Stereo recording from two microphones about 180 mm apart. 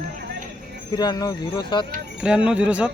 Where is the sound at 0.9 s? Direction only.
20° left (ahead or behind).